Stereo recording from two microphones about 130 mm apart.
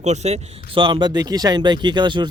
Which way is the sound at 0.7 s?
35° right (ahead or behind).